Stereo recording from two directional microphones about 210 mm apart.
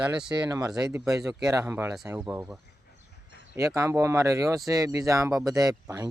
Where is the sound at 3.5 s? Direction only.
15° right (ahead or behind).